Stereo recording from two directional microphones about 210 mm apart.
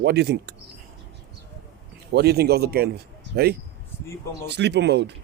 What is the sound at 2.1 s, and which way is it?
Speech, 50° right (ahead or behind).